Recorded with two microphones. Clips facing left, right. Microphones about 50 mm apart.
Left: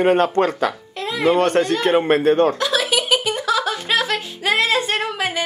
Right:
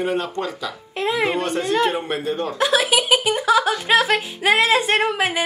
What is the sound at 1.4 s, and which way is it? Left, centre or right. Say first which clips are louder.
Speech: left 3 dB; left.